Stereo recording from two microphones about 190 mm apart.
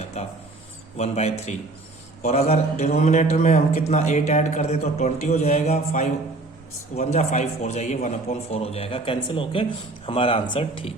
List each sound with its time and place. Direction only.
0.9 s a man's voice: 35° left (ahead or behind)